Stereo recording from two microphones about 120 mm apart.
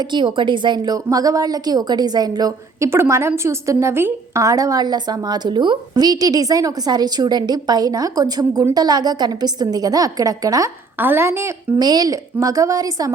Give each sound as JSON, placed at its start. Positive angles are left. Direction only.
{"t": 0.0, "sound": "a woman's voice", "side_deg": -40}
{"t": 2.9, "sound": "a woman's voice", "side_deg": -20}
{"t": 10.9, "sound": "a woman's voice", "side_deg": -15}
{"t": 11.8, "sound": "a woman's voice", "side_deg": -35}